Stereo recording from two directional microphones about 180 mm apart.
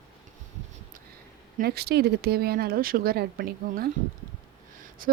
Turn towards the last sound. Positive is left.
turn(degrees=-55)  # may be behind; listen again after turning